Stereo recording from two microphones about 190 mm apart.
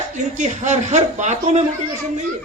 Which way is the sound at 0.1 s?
40° right (ahead or behind).